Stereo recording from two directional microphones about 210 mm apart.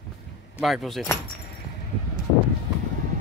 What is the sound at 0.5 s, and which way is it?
Speech, centre (ahead or behind).